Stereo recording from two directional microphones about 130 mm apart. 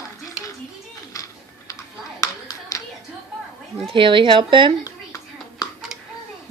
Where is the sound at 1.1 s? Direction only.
25° left (ahead or behind).